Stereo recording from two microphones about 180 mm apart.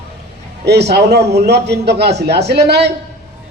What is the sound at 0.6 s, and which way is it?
A man's voice, 70° right (ahead or behind).